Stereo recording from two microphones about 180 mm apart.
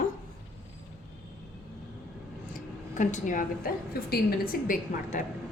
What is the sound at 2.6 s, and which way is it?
A woman's voice, 45° left (ahead or behind).